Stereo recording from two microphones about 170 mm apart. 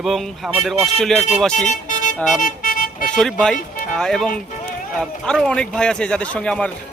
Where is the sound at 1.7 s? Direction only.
45° left (ahead or behind).